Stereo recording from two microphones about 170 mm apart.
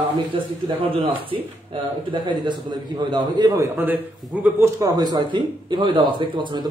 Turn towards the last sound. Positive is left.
turn(degrees=-25)  # may be behind; listen again after turning